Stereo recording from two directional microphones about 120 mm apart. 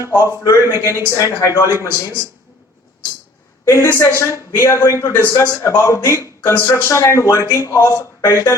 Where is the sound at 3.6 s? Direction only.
25° left (ahead or behind).